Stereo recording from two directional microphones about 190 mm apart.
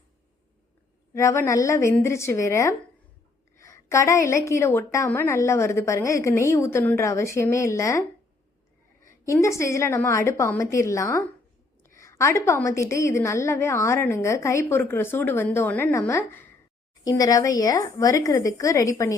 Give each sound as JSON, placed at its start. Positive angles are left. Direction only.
{"t": 1.1, "sound": "a woman's voice", "side_deg": 15}
{"t": 9.2, "sound": "a woman's voice", "side_deg": 15}